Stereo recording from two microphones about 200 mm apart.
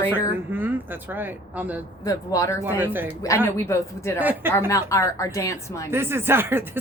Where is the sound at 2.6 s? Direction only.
10° right (ahead or behind).